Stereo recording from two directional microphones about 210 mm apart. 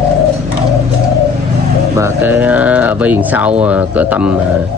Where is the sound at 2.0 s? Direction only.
10° right (ahead or behind).